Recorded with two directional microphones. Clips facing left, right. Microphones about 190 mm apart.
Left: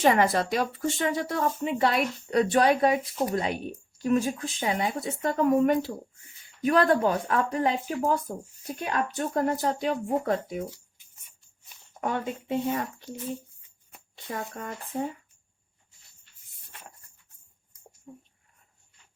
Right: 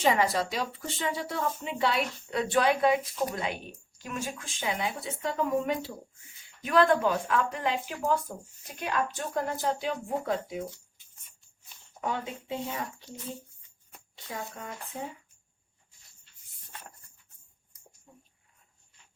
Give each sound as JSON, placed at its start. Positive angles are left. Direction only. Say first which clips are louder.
{"t": 0.0, "sound": "speech", "louder": "left 4 dB", "side_deg": 55}
{"t": 6.7, "sound": "speech", "louder": "left 2 dB", "side_deg": 40}
{"t": 11.9, "sound": "speech", "louder": "left 4 dB", "side_deg": 55}
{"t": 14.3, "sound": "speech", "louder": "left 3 dB", "side_deg": 50}